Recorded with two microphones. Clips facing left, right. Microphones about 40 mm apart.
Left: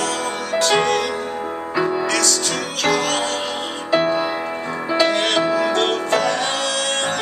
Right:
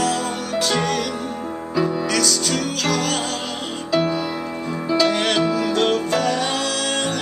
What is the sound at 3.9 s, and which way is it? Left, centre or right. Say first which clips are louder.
Music: left 2 dB; left.